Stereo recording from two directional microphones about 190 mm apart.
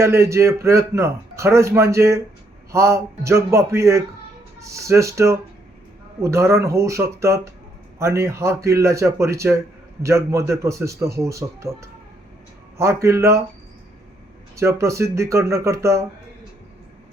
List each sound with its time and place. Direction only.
0.0 s a man's voice: 15° right (ahead or behind)
14.5 s a man's voice: 15° right (ahead or behind)